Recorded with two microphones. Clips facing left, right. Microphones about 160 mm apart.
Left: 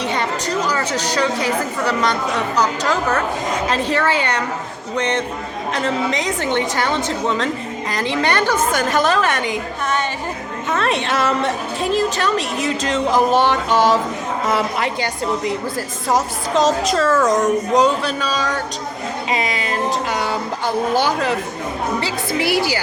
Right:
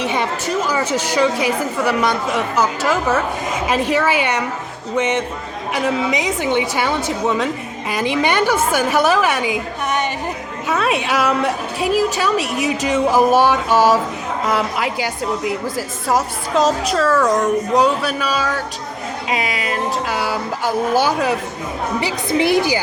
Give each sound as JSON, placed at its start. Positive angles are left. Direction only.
{"t": 0.0, "sound": "a woman's voice", "side_deg": -15}